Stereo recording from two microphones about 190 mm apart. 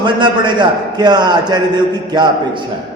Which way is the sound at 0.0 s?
25° right (ahead or behind).